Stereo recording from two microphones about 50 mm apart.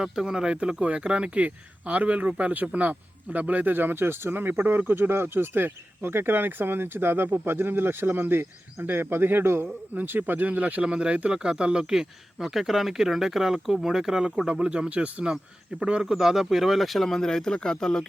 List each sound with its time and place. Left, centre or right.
0.0 s speech: centre; by 9.6 s right
9.9 s speech: right
10.8 s speech: right
16.1 s speech: centre